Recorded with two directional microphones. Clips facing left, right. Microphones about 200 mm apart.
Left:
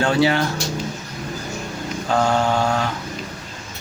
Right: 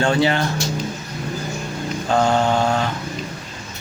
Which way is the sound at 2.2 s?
20° right (ahead or behind).